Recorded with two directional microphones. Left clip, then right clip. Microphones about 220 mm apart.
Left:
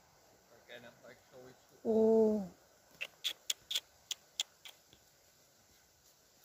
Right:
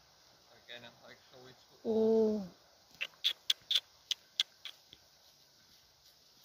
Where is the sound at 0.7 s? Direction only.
50° right (ahead or behind).